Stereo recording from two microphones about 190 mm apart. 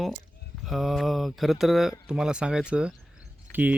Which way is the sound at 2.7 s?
5° right (ahead or behind).